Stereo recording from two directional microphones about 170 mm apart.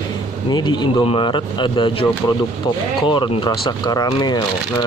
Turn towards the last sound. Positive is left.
turn(degrees=20)  # may be behind; listen again after turning